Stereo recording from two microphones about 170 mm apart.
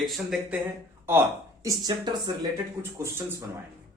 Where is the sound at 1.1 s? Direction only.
15° right (ahead or behind).